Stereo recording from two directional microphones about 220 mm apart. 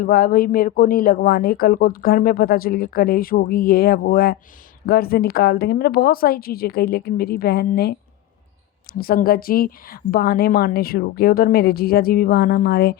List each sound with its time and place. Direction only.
0.0 s a woman's voice: 40° left (ahead or behind)